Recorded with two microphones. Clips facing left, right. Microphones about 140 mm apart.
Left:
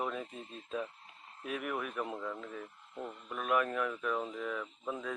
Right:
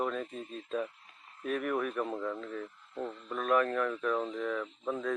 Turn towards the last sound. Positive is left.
turn(degrees=10)  # may be behind; listen again after turning